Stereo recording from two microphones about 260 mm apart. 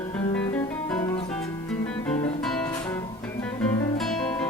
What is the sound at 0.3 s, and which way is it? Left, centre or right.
Music, centre.